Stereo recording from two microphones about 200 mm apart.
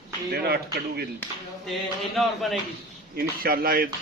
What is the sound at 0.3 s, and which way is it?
Speech, 50° right (ahead or behind).